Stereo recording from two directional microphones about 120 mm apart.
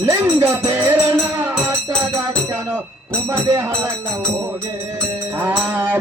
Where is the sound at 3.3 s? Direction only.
25° right (ahead or behind).